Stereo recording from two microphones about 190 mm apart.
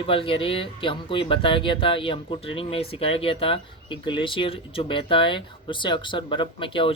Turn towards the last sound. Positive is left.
turn(degrees=25)  # may be behind; listen again after turning